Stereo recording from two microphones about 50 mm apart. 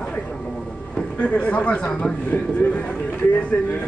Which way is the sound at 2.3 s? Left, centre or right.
Left.